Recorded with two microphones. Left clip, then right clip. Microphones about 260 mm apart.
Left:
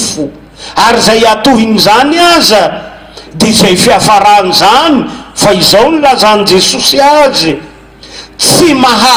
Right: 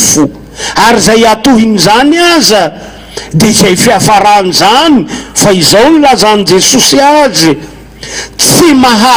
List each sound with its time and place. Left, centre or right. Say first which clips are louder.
0.6 s a man's voice: right 1 dB; right